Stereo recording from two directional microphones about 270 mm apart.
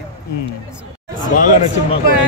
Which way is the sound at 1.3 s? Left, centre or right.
Left.